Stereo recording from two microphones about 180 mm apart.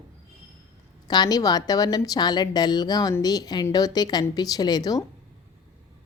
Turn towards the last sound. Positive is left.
turn(degrees=20)  # may be behind; listen again after turning